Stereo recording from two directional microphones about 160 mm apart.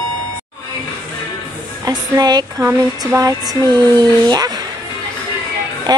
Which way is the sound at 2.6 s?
20° right (ahead or behind).